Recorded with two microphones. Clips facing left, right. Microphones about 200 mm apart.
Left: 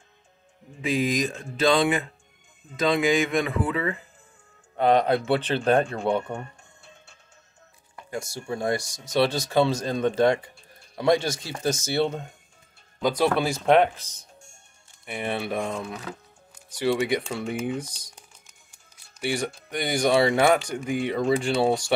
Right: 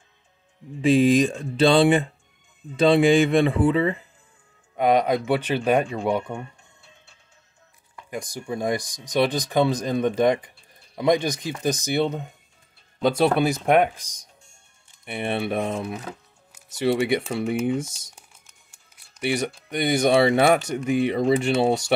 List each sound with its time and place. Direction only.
0.8 s speech: 30° right (ahead or behind)
4.7 s speech: 10° right (ahead or behind)
6.8 s music: 45° left (ahead or behind)
8.1 s speech: 15° right (ahead or behind)
15.0 s speech: 25° right (ahead or behind)
19.2 s speech: 20° right (ahead or behind)